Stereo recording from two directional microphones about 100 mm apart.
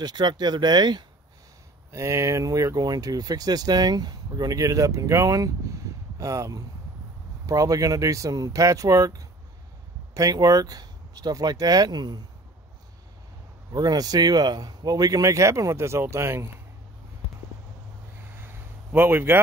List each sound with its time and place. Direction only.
0.0 s speech: 45° right (ahead or behind)
1.9 s speech: 30° right (ahead or behind)
13.7 s speech: 40° right (ahead or behind)
18.4 s a sound: 20° right (ahead or behind)